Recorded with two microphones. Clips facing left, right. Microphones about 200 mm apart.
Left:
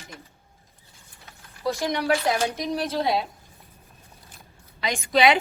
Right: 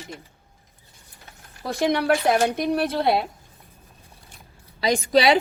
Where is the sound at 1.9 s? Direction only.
55° right (ahead or behind).